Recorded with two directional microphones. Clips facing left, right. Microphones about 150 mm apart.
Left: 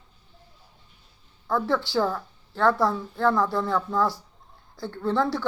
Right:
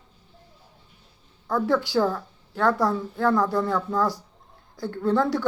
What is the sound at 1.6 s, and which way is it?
Speech, 45° right (ahead or behind).